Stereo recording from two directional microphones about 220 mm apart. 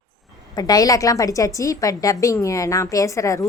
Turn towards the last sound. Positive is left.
turn(degrees=15)  # may be behind; listen again after turning